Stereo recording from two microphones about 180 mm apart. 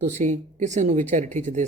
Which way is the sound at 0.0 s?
40° right (ahead or behind).